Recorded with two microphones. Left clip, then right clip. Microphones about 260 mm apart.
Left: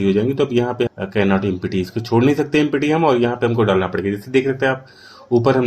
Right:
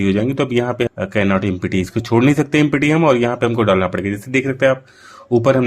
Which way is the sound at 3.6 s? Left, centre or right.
Right.